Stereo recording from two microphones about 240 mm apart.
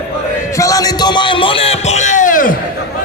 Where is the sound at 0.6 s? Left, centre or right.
Centre; by 2.5 s left.